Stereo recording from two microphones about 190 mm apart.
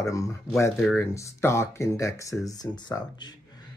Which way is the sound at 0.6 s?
10° left (ahead or behind).